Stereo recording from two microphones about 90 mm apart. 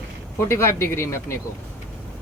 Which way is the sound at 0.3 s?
30° left (ahead or behind).